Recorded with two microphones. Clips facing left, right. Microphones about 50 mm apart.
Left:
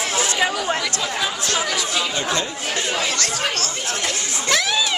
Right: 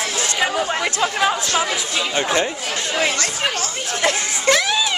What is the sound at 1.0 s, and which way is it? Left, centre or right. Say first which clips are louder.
Speech: right 5 dB; right.